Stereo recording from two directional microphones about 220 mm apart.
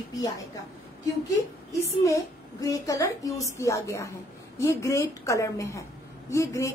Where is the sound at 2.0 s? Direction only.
15° left (ahead or behind).